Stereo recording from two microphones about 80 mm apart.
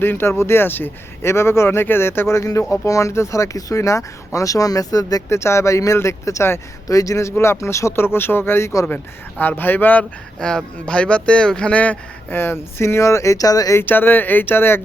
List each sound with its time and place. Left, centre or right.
0.0 s speech: left
5.3 s speech: left
9.4 s speech: left
12.4 s speech: left
13.7 s speech: left